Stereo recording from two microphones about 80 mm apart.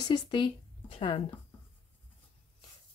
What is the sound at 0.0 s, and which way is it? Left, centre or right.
Speech, left.